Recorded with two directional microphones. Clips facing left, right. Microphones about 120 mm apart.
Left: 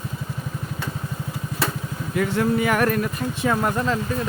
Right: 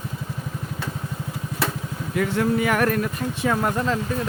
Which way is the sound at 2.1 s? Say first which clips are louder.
Even; 25° left (ahead or behind).